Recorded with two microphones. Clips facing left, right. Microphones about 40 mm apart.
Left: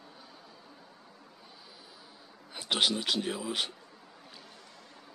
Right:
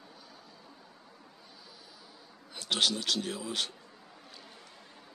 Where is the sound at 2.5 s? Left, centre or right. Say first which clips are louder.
Left 1 dB; centre.